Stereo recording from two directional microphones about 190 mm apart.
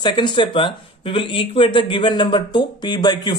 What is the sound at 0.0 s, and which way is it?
A man's voice, 25° left (ahead or behind).